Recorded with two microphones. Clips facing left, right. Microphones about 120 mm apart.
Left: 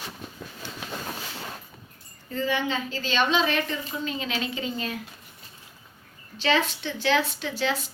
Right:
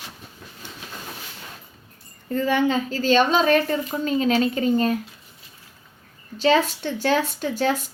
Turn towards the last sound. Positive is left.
turn(degrees=-45)  # may be behind; listen again after turning